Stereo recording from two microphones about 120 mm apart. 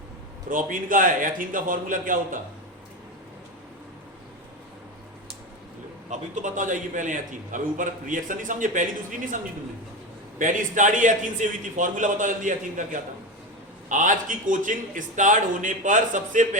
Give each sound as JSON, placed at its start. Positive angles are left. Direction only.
{"t": 0.5, "sound": "a man's voice", "side_deg": -90}
{"t": 6.1, "sound": "a man's voice", "side_deg": -90}